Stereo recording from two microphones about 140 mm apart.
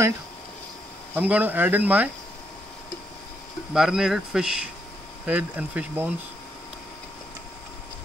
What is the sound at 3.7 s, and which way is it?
Speech, 5° right (ahead or behind).